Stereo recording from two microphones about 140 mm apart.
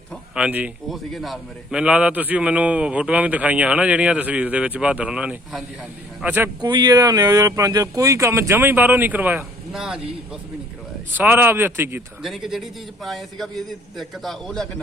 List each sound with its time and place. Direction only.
0.3 s a man's voice: 10° right (ahead or behind)
6.6 s a man's voice: 30° right (ahead or behind); by 10.0 s 5° right (ahead or behind)
11.1 s a man's voice: 15° right (ahead or behind)
12.2 s a man's voice: centre (ahead or behind)